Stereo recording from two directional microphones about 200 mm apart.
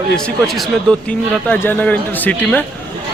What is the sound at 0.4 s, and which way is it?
A man's voice, centre (ahead or behind).